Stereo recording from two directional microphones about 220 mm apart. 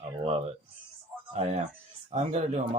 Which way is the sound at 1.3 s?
30° right (ahead or behind).